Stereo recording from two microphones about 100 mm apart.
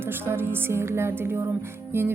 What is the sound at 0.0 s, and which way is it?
Music, 25° right (ahead or behind).